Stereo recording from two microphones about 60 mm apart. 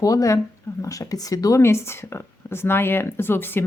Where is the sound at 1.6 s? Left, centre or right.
Left.